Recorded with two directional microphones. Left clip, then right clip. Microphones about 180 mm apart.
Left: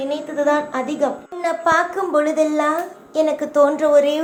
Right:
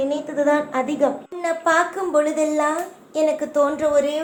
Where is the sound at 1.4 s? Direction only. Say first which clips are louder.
Left 2 dB; 25° left (ahead or behind).